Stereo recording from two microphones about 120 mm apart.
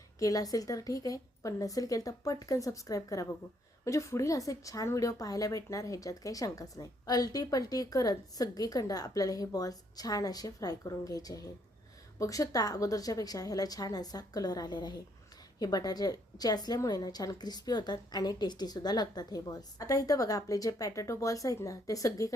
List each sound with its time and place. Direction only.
0.2 s a woman's voice: 30° left (ahead or behind)